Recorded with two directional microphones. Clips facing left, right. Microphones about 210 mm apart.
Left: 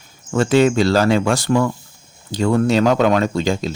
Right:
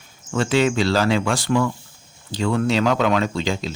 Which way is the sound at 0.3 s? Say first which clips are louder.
Left 5 dB; 45° left (ahead or behind).